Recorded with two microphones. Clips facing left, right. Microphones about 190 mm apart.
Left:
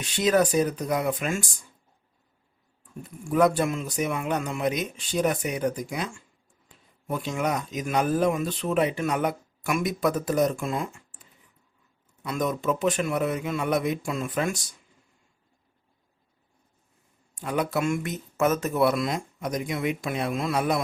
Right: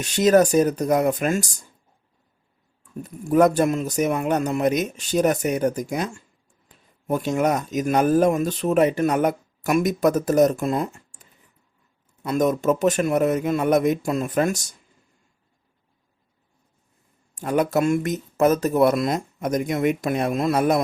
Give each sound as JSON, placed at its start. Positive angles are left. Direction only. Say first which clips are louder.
{"t": 0.0, "sound": "speech", "louder": "right 6 dB", "side_deg": -45}
{"t": 3.0, "sound": "speech", "louder": "right 5 dB", "side_deg": -40}
{"t": 17.3, "sound": "speech", "louder": "right 6 dB", "side_deg": -45}